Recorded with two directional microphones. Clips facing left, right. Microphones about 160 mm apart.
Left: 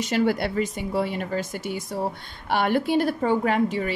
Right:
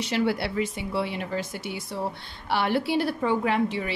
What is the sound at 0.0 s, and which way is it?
A woman's voice, 45° left (ahead or behind).